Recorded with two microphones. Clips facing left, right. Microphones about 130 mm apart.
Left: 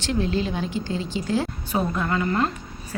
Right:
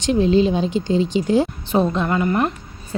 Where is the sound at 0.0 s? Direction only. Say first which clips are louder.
Right 9 dB; 20° right (ahead or behind).